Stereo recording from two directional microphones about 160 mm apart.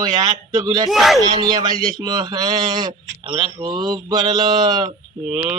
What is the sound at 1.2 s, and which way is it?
Speech, 25° right (ahead or behind).